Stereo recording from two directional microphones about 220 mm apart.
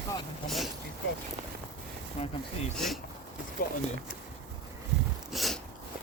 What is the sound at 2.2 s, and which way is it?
Speech, 30° left (ahead or behind).